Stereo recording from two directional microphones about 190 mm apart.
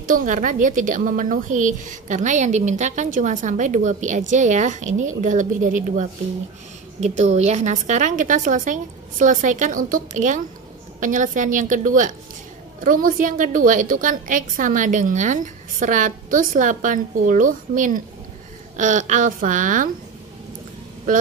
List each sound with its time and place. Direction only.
0.0 s a woman's voice: 45° right (ahead or behind)